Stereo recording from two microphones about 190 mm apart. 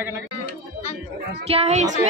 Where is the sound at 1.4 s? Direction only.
35° right (ahead or behind).